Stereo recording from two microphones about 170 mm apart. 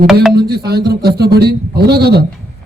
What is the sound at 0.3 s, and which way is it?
A man's voice, 70° right (ahead or behind).